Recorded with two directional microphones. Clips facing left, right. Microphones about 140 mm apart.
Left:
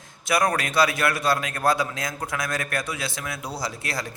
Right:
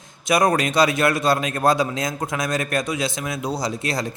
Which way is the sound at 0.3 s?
20° right (ahead or behind).